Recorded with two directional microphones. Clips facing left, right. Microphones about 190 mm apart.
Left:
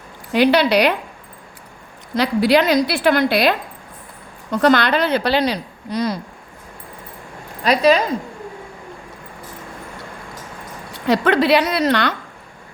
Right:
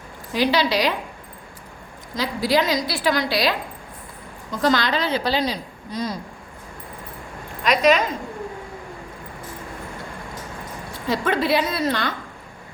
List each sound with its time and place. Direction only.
0.3 s a woman's voice: 60° left (ahead or behind)
2.1 s a woman's voice: 65° left (ahead or behind)
4.5 s a woman's voice: 65° left (ahead or behind)
7.6 s speech: 35° left (ahead or behind)
11.0 s a woman's voice: 70° left (ahead or behind)